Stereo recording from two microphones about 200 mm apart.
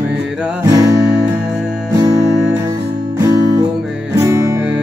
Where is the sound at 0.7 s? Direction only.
20° right (ahead or behind).